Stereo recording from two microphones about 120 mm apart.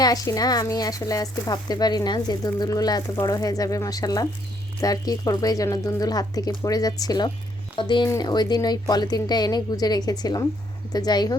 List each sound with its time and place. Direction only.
0.0 s speech: 30° left (ahead or behind)